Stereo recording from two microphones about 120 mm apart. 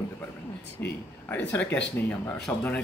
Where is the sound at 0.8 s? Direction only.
20° left (ahead or behind).